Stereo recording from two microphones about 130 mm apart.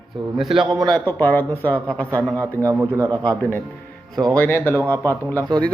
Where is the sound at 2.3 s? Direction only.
25° right (ahead or behind).